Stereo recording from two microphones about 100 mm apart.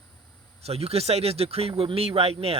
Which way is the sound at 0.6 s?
90° right.